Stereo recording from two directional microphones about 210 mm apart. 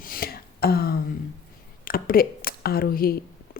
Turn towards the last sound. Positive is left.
turn(degrees=45)  # may be behind; listen again after turning